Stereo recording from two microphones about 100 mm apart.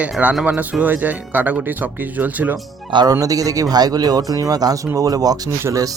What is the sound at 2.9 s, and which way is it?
Speech, 50° right (ahead or behind).